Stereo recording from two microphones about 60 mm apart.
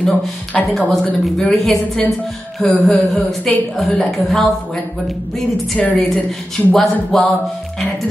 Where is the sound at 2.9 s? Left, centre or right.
Centre.